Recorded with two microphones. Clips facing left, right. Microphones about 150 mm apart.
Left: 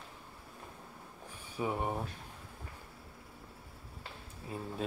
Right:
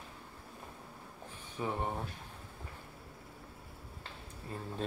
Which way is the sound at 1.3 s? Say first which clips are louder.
Left 2 dB; 10° left (ahead or behind).